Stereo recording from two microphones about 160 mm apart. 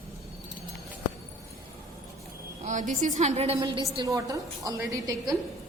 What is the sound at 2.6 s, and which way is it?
Speech, 50° right (ahead or behind).